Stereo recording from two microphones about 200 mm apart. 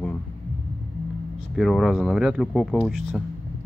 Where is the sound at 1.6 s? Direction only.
Centre (ahead or behind).